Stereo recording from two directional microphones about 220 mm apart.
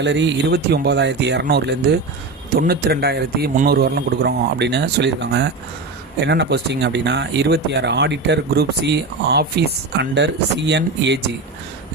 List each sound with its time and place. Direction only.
0.0 s speech: 55° right (ahead or behind)